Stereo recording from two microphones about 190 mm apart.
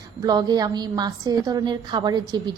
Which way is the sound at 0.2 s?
20° right (ahead or behind).